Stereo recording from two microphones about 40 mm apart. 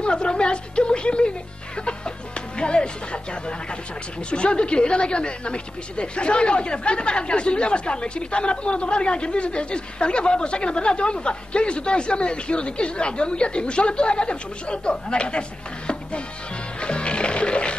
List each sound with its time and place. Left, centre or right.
0.0 s a woman's voice: left
1.8 s music: left
4.2 s speech: left
15.9 s music: left